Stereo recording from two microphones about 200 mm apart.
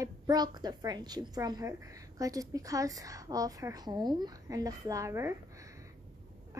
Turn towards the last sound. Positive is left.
turn(degrees=-15)  # may be behind; listen again after turning